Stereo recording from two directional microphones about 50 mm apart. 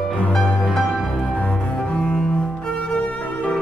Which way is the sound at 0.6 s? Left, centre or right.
Centre.